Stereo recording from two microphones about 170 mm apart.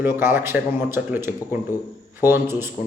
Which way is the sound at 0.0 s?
15° right (ahead or behind).